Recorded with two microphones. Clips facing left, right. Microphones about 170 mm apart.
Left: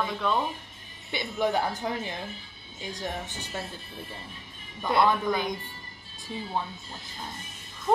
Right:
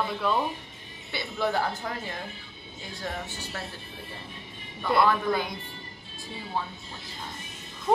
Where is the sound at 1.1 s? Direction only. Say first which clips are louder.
Left 1 dB; 15° left (ahead or behind).